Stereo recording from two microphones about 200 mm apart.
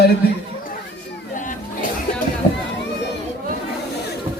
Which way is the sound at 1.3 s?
40° left (ahead or behind).